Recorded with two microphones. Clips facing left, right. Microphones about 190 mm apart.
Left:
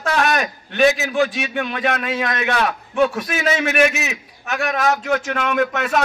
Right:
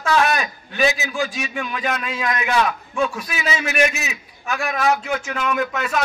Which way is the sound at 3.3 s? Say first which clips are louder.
Left 5 dB; 50° left (ahead or behind).